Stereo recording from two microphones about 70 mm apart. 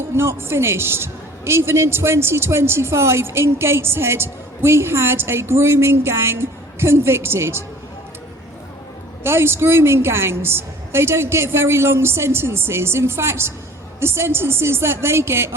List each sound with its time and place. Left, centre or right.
0.2 s a man's voice: right
9.2 s a man's voice: right